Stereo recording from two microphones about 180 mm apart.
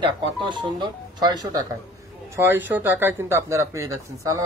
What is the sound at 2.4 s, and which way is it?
Speech, 10° right (ahead or behind).